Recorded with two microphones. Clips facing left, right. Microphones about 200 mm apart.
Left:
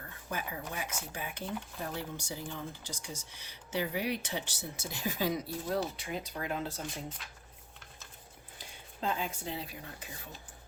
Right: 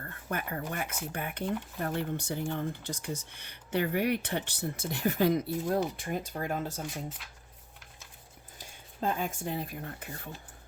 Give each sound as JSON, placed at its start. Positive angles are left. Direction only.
{"t": 0.0, "sound": "speech", "side_deg": -60}
{"t": 7.2, "sound": "speech", "side_deg": -5}
{"t": 8.5, "sound": "speech", "side_deg": -50}